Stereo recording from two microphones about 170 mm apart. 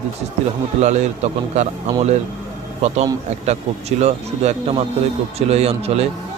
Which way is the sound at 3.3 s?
40° right (ahead or behind).